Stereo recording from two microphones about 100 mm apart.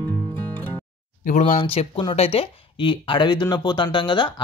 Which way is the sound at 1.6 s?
75° left (ahead or behind).